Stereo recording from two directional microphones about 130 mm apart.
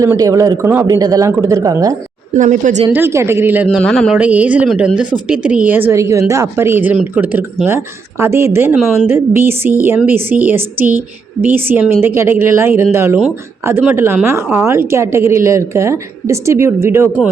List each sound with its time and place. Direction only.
0.0 s a woman's voice: 25° right (ahead or behind)
2.3 s speech: 70° right (ahead or behind)
2.9 s a woman's voice: 20° right (ahead or behind)
3.7 s a man's voice: 5° left (ahead or behind)
4.1 s a woman's voice: 10° right (ahead or behind)
8.7 s a woman's voice: centre (ahead or behind)
9.0 s a woman's voice: 15° right (ahead or behind)